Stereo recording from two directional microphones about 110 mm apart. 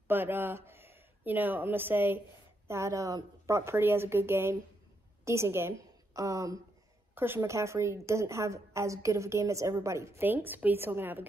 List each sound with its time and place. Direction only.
0.1 s a woman's voice: 20° right (ahead or behind)